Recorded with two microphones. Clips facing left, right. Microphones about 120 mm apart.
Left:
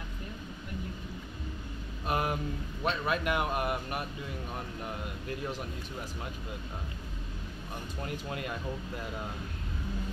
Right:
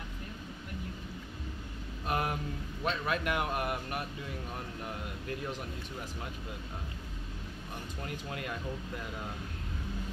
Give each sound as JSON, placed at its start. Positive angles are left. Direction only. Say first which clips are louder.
{"t": 2.0, "sound": "speech", "louder": "left 2 dB", "side_deg": 20}
{"t": 8.3, "sound": "speech", "louder": "left 1 dB", "side_deg": 25}